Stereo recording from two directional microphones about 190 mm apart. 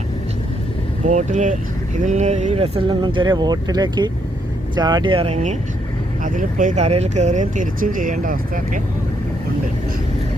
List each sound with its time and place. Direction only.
1.0 s speech: 40° right (ahead or behind)